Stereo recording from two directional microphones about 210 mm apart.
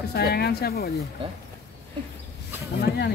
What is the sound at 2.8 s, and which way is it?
Speech, 50° left (ahead or behind).